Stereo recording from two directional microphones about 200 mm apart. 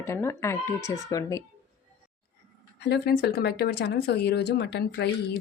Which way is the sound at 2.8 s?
55° left (ahead or behind).